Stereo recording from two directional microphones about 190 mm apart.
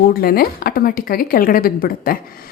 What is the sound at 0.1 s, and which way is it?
A woman's voice, 50° left (ahead or behind).